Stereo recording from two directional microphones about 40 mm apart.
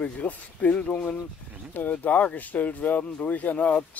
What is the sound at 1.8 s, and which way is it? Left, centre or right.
Speech, left.